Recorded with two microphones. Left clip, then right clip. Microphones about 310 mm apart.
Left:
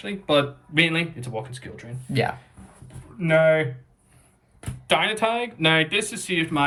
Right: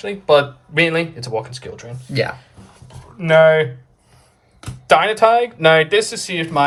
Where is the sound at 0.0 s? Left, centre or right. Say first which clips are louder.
Right 8 dB; centre.